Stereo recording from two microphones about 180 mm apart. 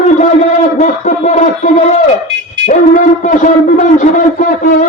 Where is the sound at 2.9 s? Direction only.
45° left (ahead or behind).